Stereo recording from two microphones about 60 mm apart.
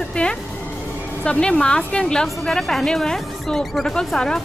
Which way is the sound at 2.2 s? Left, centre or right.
Centre.